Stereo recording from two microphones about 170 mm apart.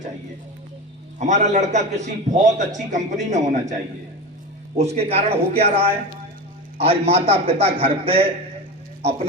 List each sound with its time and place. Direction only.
1.2 s a man's voice: 45° right (ahead or behind)
4.8 s a man's voice: 40° right (ahead or behind)
9.0 s a sound: 40° right (ahead or behind)